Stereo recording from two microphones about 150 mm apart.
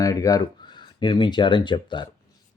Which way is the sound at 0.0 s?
25° left (ahead or behind).